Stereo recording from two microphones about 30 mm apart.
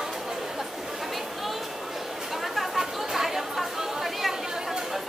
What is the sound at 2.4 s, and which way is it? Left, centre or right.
Chatter, centre.